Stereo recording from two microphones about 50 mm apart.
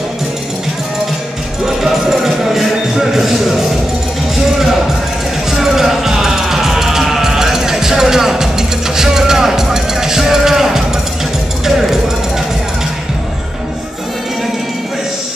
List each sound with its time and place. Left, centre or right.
1.8 s music: centre
5.5 s music: centre